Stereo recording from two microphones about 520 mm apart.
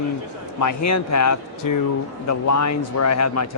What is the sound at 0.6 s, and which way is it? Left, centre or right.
Speech, left.